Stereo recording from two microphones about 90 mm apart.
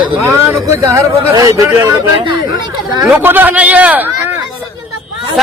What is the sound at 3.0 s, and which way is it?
Speech, 20° right (ahead or behind).